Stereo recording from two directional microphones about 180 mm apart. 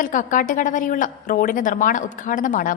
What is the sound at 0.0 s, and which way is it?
Speech, 45° left (ahead or behind).